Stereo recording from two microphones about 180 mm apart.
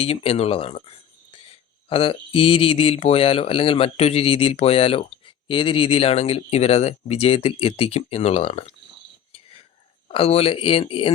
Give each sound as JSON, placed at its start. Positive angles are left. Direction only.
{"t": 0.0, "sound": "speech", "side_deg": 35}
{"t": 9.3, "sound": "whispering", "side_deg": 30}
{"t": 10.1, "sound": "speech", "side_deg": 30}